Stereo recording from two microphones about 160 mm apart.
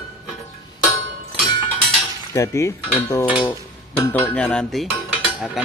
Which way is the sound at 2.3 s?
20° left (ahead or behind).